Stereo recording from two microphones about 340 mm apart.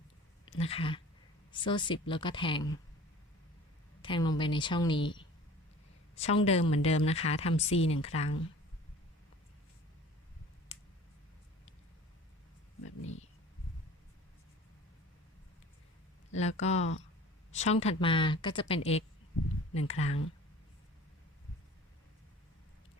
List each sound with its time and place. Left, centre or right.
0.4 s speech: centre
4.0 s speech: centre
12.8 s a sound: left
16.3 s speech: centre